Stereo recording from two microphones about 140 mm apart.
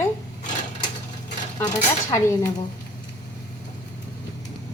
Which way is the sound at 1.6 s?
20° left (ahead or behind).